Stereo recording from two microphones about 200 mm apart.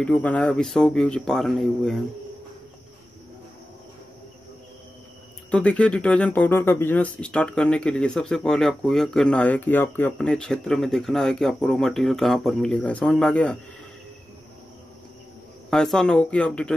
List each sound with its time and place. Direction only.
0.0 s speech: 5° left (ahead or behind)
5.5 s speech: 5° left (ahead or behind)
15.7 s speech: 5° left (ahead or behind)